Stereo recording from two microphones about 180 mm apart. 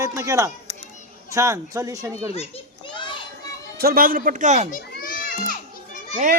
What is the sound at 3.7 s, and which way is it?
Speech, 55° right (ahead or behind).